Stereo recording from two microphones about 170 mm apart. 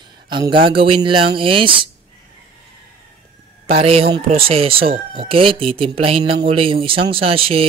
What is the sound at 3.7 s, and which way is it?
Speech, 35° right (ahead or behind).